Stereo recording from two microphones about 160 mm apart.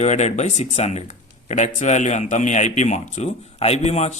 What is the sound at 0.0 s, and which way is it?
A man's voice, 45° left (ahead or behind).